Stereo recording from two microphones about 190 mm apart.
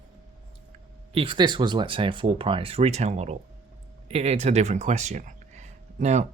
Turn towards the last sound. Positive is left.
turn(degrees=-35)  # may be behind; listen again after turning